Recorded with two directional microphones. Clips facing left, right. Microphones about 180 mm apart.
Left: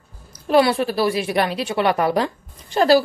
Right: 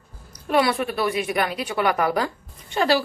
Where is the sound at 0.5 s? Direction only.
30° left (ahead or behind).